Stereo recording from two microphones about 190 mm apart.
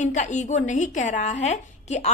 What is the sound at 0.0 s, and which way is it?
A woman's voice, 40° left (ahead or behind).